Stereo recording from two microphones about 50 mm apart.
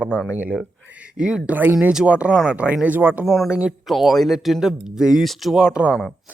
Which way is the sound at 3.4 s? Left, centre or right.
Right.